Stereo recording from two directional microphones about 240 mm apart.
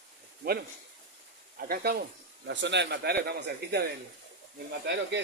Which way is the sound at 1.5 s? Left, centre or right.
Right.